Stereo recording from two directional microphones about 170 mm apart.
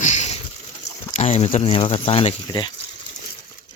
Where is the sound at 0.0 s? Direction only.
45° left (ahead or behind).